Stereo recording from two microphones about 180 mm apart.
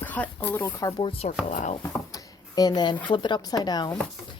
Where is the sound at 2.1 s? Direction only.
20° left (ahead or behind).